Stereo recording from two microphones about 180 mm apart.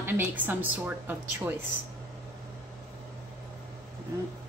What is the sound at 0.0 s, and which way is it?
Speech, 10° right (ahead or behind).